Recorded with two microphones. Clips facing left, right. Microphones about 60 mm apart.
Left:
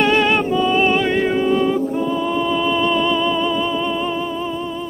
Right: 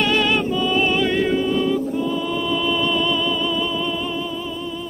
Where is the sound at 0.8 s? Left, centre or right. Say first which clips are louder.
Left 2 dB; left.